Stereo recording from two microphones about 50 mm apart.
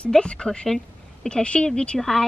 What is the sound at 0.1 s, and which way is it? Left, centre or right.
A woman's voice, centre.